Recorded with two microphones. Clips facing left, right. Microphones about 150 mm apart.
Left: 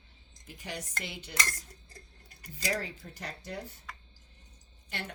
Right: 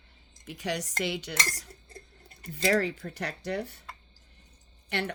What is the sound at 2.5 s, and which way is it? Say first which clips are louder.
Speech: right 9 dB; 70° right (ahead or behind).